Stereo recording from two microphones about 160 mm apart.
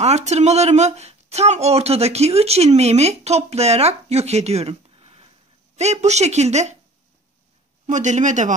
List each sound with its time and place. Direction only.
0.0 s speech: 45° right (ahead or behind)
7.8 s speech: 50° right (ahead or behind)